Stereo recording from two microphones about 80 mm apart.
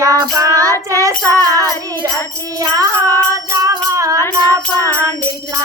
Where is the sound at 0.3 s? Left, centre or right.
Right.